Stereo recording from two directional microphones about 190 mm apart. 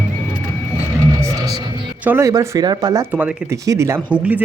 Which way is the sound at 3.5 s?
15° right (ahead or behind).